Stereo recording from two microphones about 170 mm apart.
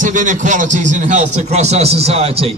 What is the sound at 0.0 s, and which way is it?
A man's voice, 50° right (ahead or behind).